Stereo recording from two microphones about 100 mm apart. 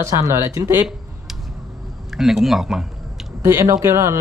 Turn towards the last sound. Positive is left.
turn(degrees=-25)  # may be behind; listen again after turning